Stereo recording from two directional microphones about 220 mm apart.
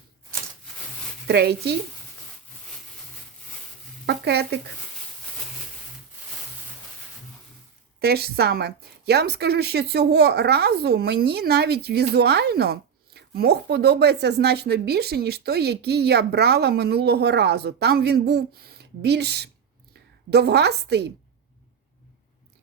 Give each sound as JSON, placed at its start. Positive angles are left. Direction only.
{"t": 1.3, "sound": "a woman's voice", "side_deg": -50}
{"t": 4.0, "sound": "speech", "side_deg": -50}
{"t": 7.9, "sound": "a woman's voice", "side_deg": -45}